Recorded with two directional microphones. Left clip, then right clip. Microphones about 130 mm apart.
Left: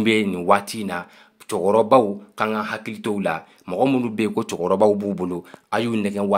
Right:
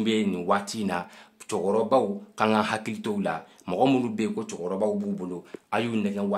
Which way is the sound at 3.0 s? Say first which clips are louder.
Left 10 dB; 20° left (ahead or behind).